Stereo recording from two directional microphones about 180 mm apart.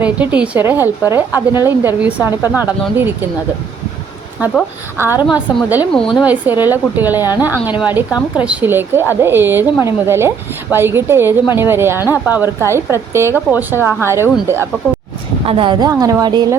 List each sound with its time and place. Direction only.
0.0 s a woman's voice: 10° right (ahead or behind)
4.9 s a woman's voice: 10° right (ahead or behind)
5.9 s a woman's voice: centre (ahead or behind); by 14.7 s 15° right (ahead or behind)
15.4 s a woman's voice: 30° right (ahead or behind)